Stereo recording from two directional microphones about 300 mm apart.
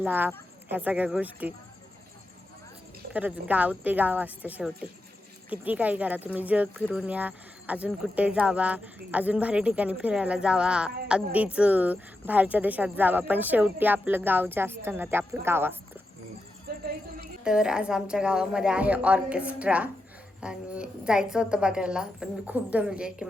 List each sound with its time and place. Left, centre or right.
0.0 s speech: centre
3.1 s speech: centre
16.7 s a sound: right
17.4 s speech: centre